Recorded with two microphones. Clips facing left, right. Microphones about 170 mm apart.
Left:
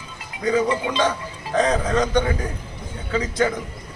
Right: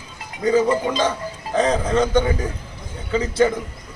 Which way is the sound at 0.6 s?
40° right (ahead or behind).